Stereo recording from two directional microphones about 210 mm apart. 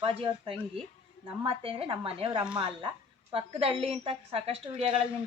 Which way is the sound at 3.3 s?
25° right (ahead or behind).